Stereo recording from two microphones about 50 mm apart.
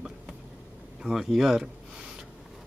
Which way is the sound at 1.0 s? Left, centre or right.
Centre.